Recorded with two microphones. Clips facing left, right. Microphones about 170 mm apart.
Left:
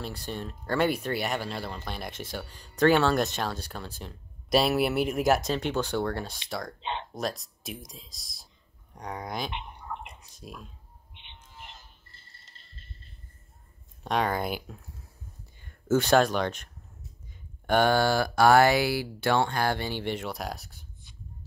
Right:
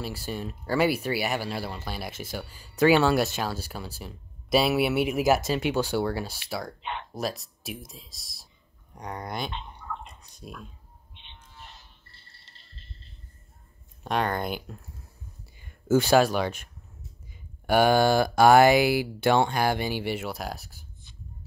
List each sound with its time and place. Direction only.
0.0 s speech: 5° right (ahead or behind)
6.8 s speech: 25° left (ahead or behind)
7.2 s speech: 5° right (ahead or behind)
9.5 s a sound: 15° left (ahead or behind)
10.2 s a sound: centre (ahead or behind)
14.0 s speech: centre (ahead or behind)
17.6 s speech: 10° right (ahead or behind)